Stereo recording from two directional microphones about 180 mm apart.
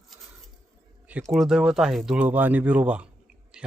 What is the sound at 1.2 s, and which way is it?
Speech, centre (ahead or behind).